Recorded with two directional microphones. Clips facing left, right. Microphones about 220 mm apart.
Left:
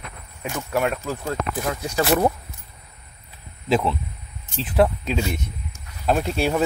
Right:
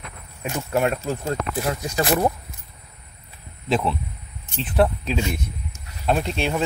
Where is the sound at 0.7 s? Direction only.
25° right (ahead or behind).